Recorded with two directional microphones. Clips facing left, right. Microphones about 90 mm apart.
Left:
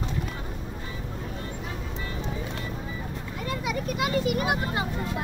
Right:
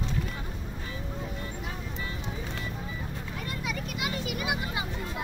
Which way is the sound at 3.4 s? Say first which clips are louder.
Left 7 dB; 40° left (ahead or behind).